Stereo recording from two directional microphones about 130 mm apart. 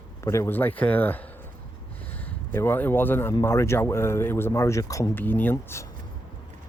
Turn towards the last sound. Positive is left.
turn(degrees=20)  # may be behind; listen again after turning